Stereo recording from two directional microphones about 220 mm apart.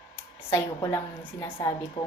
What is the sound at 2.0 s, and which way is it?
Speech, 25° left (ahead or behind).